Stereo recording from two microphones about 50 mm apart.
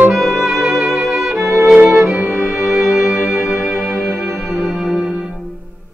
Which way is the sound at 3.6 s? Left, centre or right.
Centre.